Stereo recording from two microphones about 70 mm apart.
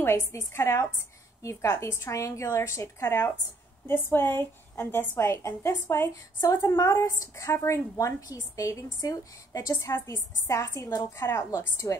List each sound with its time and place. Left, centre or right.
0.3 s a woman's voice: left
3.8 s a woman's voice: left